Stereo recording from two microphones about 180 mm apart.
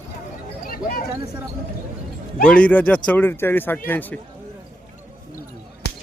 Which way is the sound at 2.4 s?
5° left (ahead or behind).